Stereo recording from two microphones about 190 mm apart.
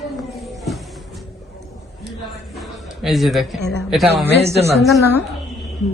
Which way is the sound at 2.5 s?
Centre (ahead or behind).